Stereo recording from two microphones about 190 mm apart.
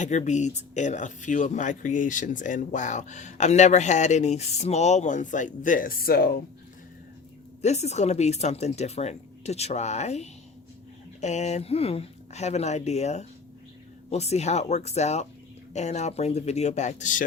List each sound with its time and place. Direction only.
0.0 s speech: 40° left (ahead or behind)
7.6 s speech: 35° left (ahead or behind)